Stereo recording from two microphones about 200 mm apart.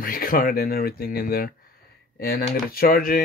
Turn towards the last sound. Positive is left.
turn(degrees=45)  # may be behind; listen again after turning